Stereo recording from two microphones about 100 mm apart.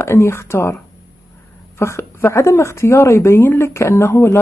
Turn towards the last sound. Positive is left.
turn(degrees=25)  # may be behind; listen again after turning